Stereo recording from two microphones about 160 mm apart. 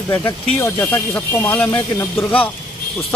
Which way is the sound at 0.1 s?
15° left (ahead or behind).